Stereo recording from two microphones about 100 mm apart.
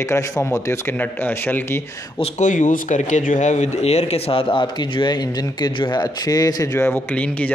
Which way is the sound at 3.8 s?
90° left.